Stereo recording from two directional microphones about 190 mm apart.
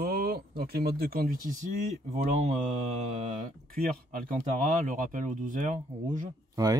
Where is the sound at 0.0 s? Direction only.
55° right (ahead or behind).